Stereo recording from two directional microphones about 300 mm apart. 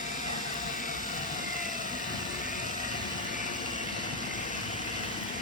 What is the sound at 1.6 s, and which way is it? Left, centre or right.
Vehicle, left.